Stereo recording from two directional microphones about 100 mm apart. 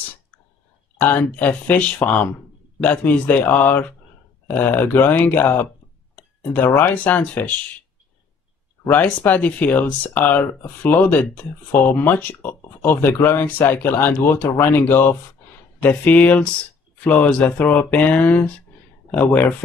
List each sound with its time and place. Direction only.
0.9 s speech: 20° left (ahead or behind)
9.0 s speech: 15° left (ahead or behind)